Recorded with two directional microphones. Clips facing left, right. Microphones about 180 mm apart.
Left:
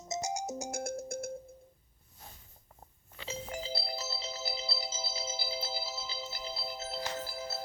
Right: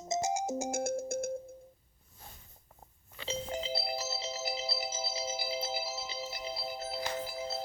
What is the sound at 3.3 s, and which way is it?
Music, 25° right (ahead or behind).